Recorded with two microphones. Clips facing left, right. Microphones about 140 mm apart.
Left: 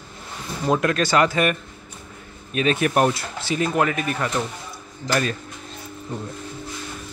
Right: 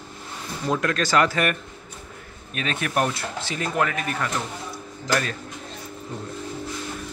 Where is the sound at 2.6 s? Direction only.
20° left (ahead or behind).